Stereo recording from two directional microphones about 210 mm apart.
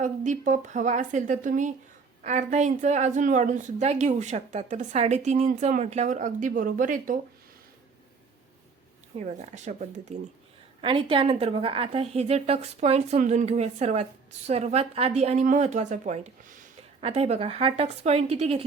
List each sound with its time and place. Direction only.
0.0 s a woman's voice: 35° right (ahead or behind)
9.1 s a woman's voice: 35° right (ahead or behind)